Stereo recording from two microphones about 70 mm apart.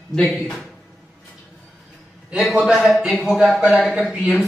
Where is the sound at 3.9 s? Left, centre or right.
Centre.